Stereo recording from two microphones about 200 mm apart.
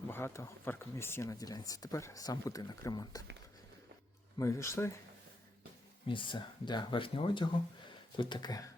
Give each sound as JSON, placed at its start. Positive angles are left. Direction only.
{"t": 0.1, "sound": "speech", "side_deg": 10}
{"t": 4.4, "sound": "speech", "side_deg": 15}
{"t": 6.1, "sound": "speech", "side_deg": 25}